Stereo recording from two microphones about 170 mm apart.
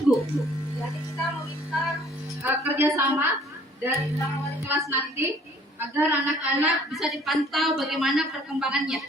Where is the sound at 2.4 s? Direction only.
15° right (ahead or behind).